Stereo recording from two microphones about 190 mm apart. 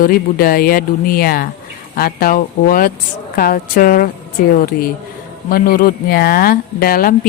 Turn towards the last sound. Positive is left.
turn(degrees=50)  # may be behind; listen again after turning